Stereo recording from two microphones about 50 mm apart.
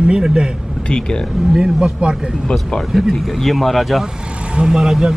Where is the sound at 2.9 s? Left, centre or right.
Centre.